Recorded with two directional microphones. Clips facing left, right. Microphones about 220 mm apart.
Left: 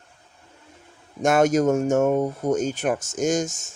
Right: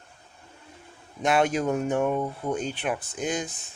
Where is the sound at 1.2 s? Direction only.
45° left (ahead or behind).